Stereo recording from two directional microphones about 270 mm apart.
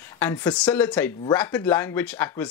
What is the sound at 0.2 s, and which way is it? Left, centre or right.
Speech, centre.